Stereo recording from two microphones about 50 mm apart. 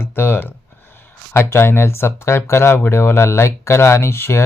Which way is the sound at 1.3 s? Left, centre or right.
Left.